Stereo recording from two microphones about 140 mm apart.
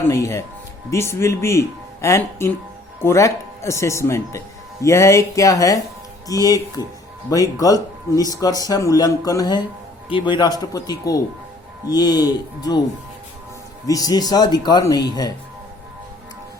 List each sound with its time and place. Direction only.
0.1 s speech: 20° left (ahead or behind)
13.8 s speech: 25° left (ahead or behind)